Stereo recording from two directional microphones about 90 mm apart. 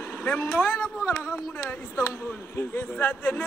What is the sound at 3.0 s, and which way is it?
Speech, 20° left (ahead or behind).